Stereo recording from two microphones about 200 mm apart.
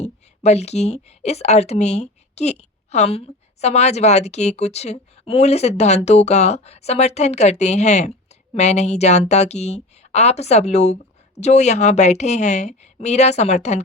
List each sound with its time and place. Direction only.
0.0 s a woman's voice: 35° left (ahead or behind)